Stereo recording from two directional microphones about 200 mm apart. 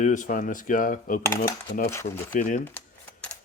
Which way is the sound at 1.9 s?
15° left (ahead or behind).